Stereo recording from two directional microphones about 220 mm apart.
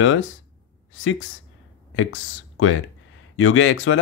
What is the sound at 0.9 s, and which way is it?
Speech, 60° left (ahead or behind).